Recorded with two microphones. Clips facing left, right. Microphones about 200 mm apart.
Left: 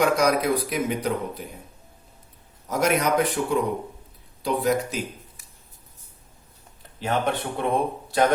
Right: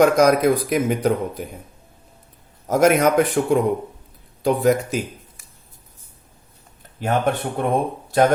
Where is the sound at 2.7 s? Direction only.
50° right (ahead or behind).